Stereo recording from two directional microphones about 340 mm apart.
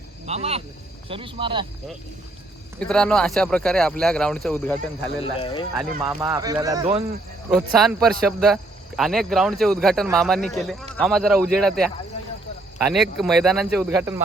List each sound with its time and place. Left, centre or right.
0.3 s speech: centre
2.8 s speech: centre
5.2 s speech: centre
6.0 s speech: centre
7.5 s speech: centre